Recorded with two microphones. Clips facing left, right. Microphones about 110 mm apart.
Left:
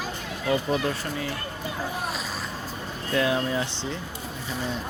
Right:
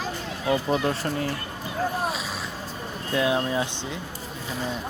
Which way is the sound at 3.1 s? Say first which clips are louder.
Right 1 dB; 20° right (ahead or behind).